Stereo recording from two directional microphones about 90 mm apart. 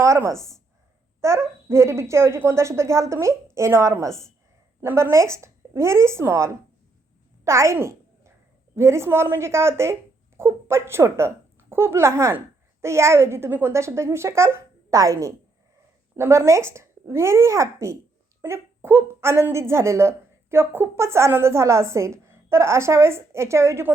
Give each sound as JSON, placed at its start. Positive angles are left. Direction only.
{"t": 0.0, "sound": "a woman's voice", "side_deg": -35}
{"t": 7.4, "sound": "a sound", "side_deg": -30}
{"t": 8.7, "sound": "a woman's voice", "side_deg": -30}